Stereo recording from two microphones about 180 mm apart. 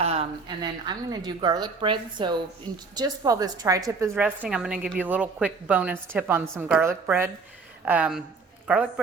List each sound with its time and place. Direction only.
0.0 s a woman's voice: 35° right (ahead or behind); by 4.1 s 20° right (ahead or behind)
4.1 s a woman's voice: 5° right (ahead or behind)